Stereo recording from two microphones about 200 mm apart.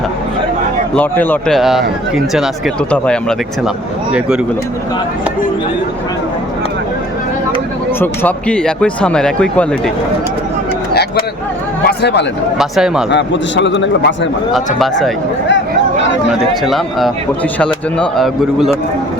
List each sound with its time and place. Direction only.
0.9 s speech: 10° left (ahead or behind)
7.9 s speech: 10° left (ahead or behind)
11.9 s a man's voice: 55° left (ahead or behind)
12.5 s speech: centre (ahead or behind)
13.1 s a man's voice: 60° left (ahead or behind)
14.5 s speech: centre (ahead or behind)
16.3 s speech: centre (ahead or behind)